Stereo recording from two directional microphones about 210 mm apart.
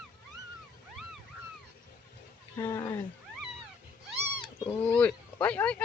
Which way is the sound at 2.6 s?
10° left (ahead or behind).